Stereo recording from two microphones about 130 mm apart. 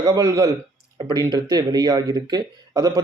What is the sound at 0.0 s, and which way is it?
Speech, 30° right (ahead or behind).